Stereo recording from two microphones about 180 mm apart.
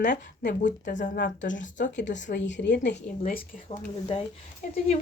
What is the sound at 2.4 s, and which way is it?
Speech, 80° left.